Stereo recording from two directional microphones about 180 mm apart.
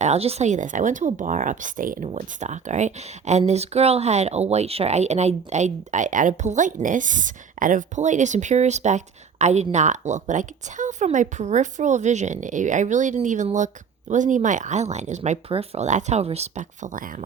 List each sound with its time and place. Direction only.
0.0 s speech: 35° right (ahead or behind)
2.0 s speech: 40° right (ahead or behind)